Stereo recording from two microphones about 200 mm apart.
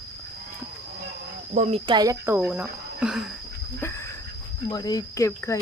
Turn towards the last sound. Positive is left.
turn(degrees=15)  # may be behind; listen again after turning